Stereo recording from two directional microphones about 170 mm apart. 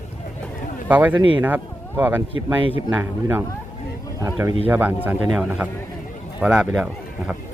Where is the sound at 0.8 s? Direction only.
10° right (ahead or behind).